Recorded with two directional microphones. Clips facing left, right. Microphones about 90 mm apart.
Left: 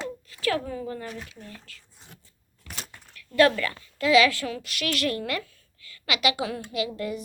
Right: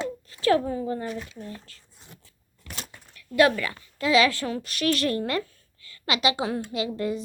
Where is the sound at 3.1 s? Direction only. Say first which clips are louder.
Even; 15° right (ahead or behind).